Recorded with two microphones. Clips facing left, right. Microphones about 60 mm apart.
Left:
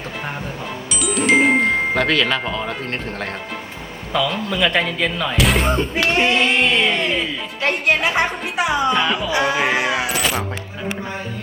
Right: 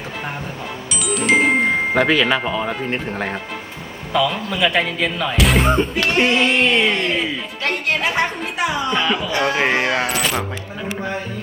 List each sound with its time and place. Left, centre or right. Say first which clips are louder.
0.9 s music: left 1 dB; centre
4.1 s speech: right 1 dB; centre
7.6 s a woman's voice: left 3 dB; left
8.9 s speech: left 1 dB; centre